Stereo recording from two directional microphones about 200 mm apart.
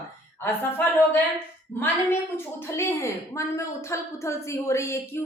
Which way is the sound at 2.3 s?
15° left (ahead or behind).